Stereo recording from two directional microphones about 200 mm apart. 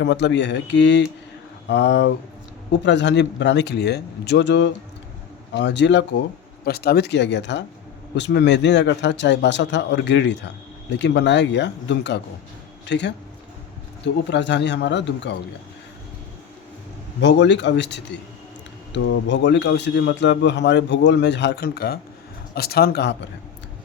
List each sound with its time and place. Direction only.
0.0 s a man's voice: 60° left (ahead or behind)
17.2 s a man's voice: 60° left (ahead or behind)